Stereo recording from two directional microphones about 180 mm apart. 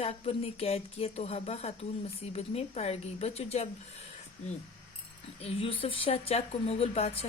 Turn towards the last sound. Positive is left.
turn(degrees=35)  # may be behind; listen again after turning